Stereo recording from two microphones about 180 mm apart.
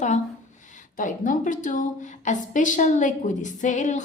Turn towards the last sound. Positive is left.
turn(degrees=45)  # may be behind; listen again after turning